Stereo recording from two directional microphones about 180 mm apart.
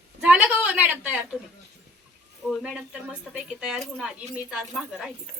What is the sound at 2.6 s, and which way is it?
Speech, 5° right (ahead or behind).